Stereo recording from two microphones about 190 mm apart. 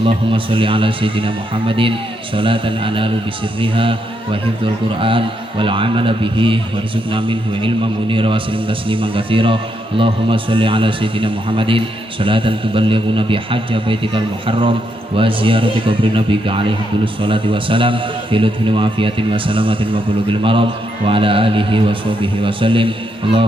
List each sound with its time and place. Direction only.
0.0 s a man's voice: 25° right (ahead or behind)